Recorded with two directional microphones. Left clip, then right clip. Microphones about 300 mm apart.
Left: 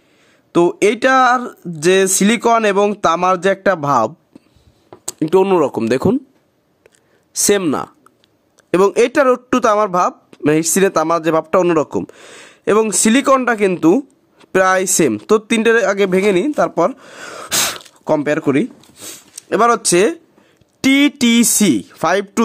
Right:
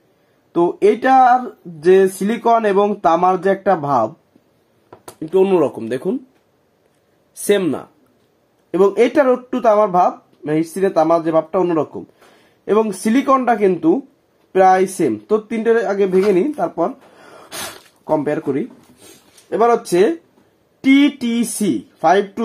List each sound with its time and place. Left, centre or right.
0.5 s speech: left
5.2 s speech: left
7.4 s speech: left